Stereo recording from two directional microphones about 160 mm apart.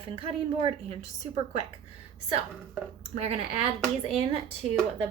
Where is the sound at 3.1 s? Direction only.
40° right (ahead or behind).